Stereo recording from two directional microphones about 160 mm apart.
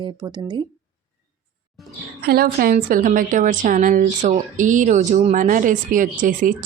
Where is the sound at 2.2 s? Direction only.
75° right (ahead or behind).